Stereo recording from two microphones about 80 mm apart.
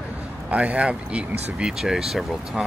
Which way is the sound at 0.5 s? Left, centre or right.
Centre.